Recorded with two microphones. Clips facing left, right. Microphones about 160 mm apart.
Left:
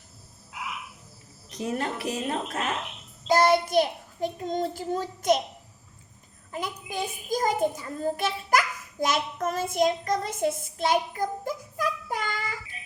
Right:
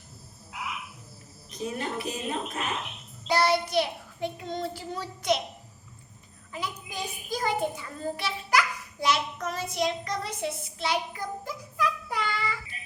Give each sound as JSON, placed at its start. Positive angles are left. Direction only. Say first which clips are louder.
{"t": 1.5, "sound": "a woman's voice", "louder": "left 3 dB", "side_deg": 75}
{"t": 3.2, "sound": "a child's voice", "louder": "left 4 dB", "side_deg": 45}
{"t": 6.5, "sound": "a child's voice", "louder": "left 3 dB", "side_deg": 50}